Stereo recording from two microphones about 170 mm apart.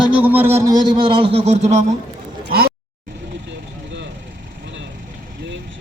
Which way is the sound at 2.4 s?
65° right (ahead or behind).